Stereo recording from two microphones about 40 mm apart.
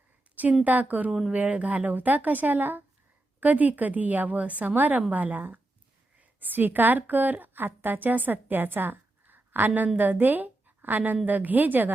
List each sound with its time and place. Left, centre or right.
0.6 s a woman's voice: right